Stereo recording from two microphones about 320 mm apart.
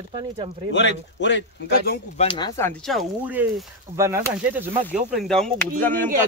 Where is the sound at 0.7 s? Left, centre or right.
Left.